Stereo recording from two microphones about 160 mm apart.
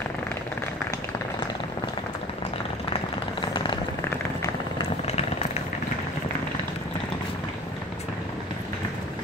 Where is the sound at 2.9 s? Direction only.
30° left (ahead or behind).